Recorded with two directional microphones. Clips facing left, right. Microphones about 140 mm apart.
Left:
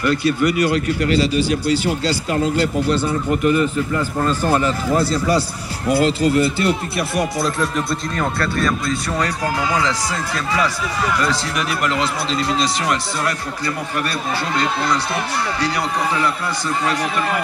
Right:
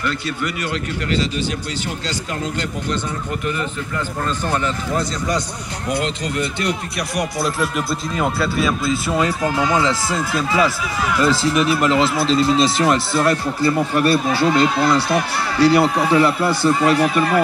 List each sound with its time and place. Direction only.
0.2 s speech: 10° left (ahead or behind)
4.5 s speech: 40° left (ahead or behind)
5.9 s speech: 5° left (ahead or behind)
13.2 s speech: 25° right (ahead or behind)
14.1 s speech: 5° right (ahead or behind)
16.2 s speech: 30° right (ahead or behind)